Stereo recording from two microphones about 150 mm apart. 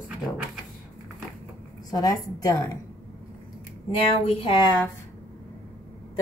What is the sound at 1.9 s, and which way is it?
Speech, 25° left (ahead or behind).